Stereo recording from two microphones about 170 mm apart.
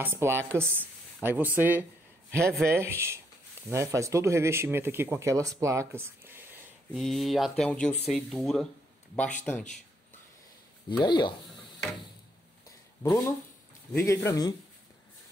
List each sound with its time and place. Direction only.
0.0 s speech: 15° right (ahead or behind)
7.0 s speech: centre (ahead or behind)
10.9 s speech: 25° left (ahead or behind)
13.0 s speech: 25° left (ahead or behind)